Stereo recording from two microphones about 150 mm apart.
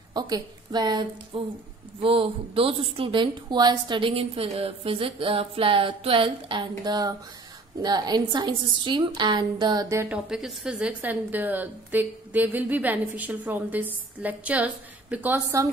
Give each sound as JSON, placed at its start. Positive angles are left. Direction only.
{"t": 0.1, "sound": "a woman's voice", "side_deg": -25}
{"t": 10.0, "sound": "a woman's voice", "side_deg": -5}